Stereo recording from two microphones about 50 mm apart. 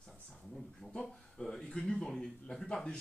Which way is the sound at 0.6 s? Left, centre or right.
Centre.